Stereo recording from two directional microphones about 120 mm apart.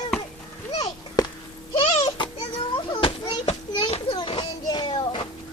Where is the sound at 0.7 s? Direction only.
30° left (ahead or behind).